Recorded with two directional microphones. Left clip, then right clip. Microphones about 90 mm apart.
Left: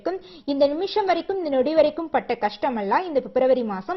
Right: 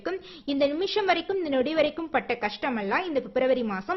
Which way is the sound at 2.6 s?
Centre (ahead or behind).